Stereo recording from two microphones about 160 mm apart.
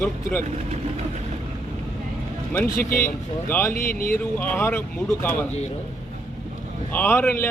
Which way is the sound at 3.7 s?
65° left (ahead or behind).